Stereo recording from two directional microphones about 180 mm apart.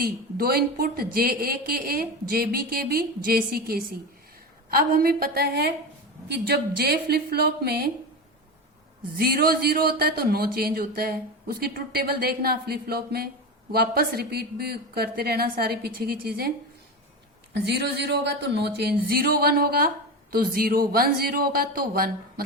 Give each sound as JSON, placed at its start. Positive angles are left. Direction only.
{"t": 0.0, "sound": "a man's voice", "side_deg": -55}
{"t": 9.1, "sound": "a man's voice", "side_deg": -55}
{"t": 17.5, "sound": "a man's voice", "side_deg": -65}